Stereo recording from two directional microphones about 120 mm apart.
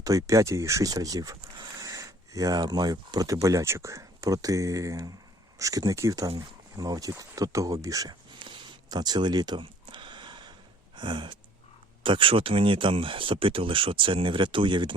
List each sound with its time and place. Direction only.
0.0 s speech: 30° right (ahead or behind)
8.4 s a sound: 40° right (ahead or behind)
10.9 s sigh: 45° right (ahead or behind)
12.0 s speech: 45° right (ahead or behind)